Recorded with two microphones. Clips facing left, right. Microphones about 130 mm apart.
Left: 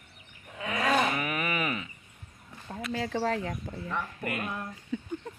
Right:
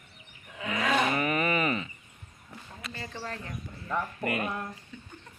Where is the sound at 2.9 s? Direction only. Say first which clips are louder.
Left 10 dB; 90° left.